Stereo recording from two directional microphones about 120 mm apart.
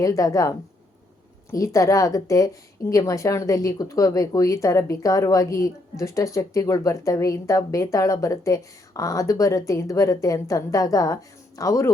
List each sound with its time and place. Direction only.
0.0 s speech: 30° left (ahead or behind)